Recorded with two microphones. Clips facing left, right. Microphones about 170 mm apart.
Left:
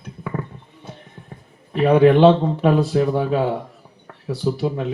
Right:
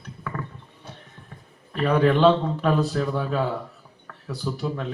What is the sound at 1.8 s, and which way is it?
Speech, 25° left (ahead or behind).